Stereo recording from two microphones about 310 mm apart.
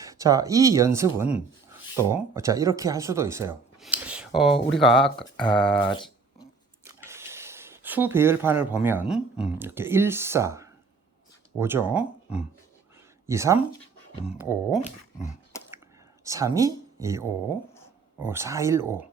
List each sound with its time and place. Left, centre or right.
0.0 s speech: centre
5.0 s speech: centre
5.5 s speech: centre
7.0 s speech: centre
13.2 s speech: centre
14.8 s speech: left
16.2 s speech: centre